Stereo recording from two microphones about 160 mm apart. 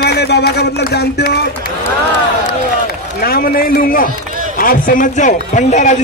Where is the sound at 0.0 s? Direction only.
90° left.